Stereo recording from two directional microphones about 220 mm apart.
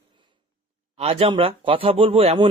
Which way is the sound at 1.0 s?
25° right (ahead or behind).